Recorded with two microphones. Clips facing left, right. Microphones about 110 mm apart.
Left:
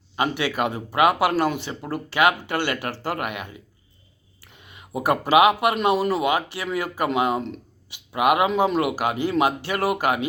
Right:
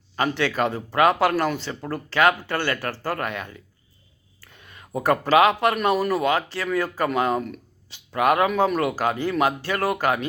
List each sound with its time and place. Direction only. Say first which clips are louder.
0.2 s speech: right 1 dB; 15° left (ahead or behind)
4.4 s a sound: even; 15° left (ahead or behind)
4.9 s speech: even; 15° left (ahead or behind)